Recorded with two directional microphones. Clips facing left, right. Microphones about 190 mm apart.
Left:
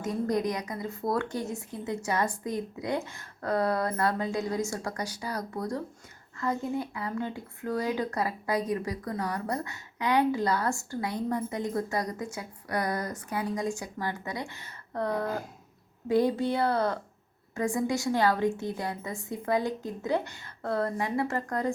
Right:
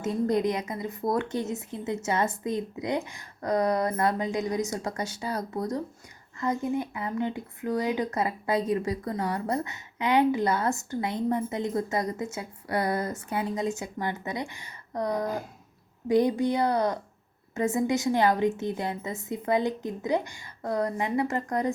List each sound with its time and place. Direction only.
0.0 s speech: 25° right (ahead or behind)